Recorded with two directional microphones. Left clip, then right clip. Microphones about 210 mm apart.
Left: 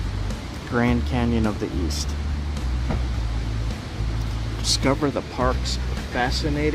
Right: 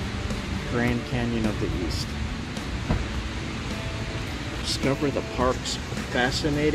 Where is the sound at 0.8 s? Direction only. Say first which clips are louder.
Left 4 dB; 30° left (ahead or behind).